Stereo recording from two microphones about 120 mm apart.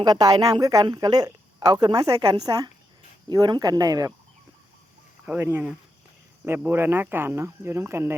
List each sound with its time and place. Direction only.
0.0 s speech: 35° right (ahead or behind)
5.2 s speech: 15° right (ahead or behind)